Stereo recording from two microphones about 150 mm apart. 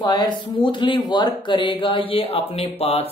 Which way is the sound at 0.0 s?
25° left (ahead or behind).